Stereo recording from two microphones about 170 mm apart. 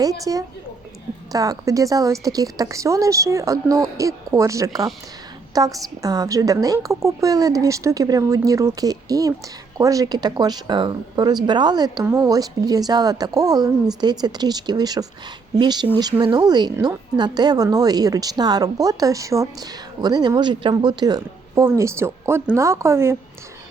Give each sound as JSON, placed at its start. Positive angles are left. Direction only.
{"t": 0.0, "sound": "a woman's voice", "side_deg": -20}